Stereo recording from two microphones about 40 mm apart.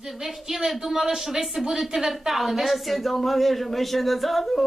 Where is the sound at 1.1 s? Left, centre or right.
Centre.